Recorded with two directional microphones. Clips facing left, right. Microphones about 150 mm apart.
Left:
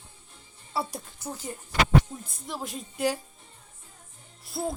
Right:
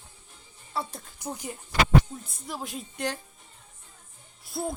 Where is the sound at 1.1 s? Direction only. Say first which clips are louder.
Right 2 dB; 15° right (ahead or behind).